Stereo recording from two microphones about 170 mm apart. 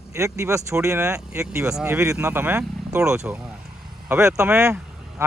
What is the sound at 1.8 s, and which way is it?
Speech, 15° right (ahead or behind).